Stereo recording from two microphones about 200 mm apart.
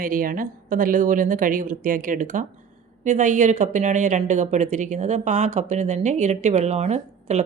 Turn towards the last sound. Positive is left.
turn(degrees=-35)  # may be behind; listen again after turning